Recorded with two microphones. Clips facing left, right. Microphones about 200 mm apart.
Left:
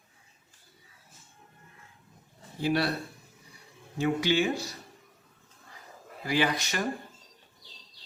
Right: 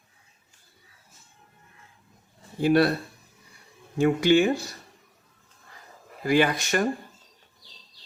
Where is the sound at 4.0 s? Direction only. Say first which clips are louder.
Right 7 dB; 50° right (ahead or behind).